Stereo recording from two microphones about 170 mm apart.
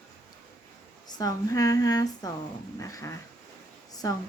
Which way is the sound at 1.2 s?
20° left (ahead or behind).